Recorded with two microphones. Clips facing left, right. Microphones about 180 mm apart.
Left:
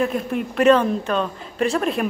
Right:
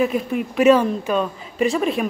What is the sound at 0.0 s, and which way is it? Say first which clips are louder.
A woman's voice: right 2 dB; centre (ahead or behind).